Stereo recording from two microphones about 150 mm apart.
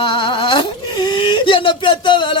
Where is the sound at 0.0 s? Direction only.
35° left (ahead or behind).